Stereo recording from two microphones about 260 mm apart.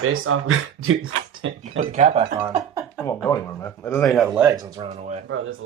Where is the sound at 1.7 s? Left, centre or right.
Right.